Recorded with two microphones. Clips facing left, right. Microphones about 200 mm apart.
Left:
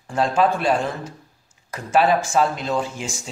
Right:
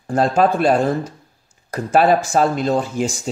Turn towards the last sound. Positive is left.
turn(degrees=-40)  # may be behind; listen again after turning